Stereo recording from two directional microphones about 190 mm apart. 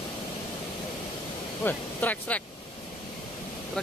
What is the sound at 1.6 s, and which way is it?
Speech, 10° left (ahead or behind).